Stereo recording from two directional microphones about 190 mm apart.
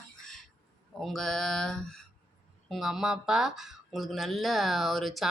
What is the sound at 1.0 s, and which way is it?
A woman's voice, centre (ahead or behind).